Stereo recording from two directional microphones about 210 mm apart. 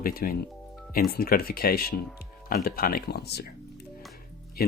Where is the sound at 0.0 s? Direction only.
45° left (ahead or behind).